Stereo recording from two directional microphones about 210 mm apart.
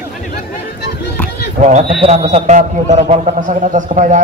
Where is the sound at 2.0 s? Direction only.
30° right (ahead or behind).